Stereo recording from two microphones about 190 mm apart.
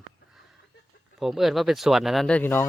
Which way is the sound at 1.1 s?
Centre (ahead or behind).